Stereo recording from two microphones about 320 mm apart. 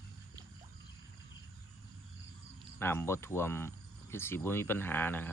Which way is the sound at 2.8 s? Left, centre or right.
Centre.